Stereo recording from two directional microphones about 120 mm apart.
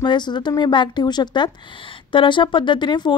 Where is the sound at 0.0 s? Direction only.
40° left (ahead or behind).